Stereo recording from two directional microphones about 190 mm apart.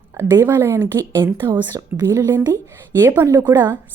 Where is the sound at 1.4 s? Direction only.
25° right (ahead or behind).